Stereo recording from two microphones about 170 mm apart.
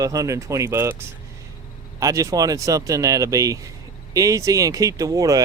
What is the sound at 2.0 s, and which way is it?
Speech, 20° right (ahead or behind).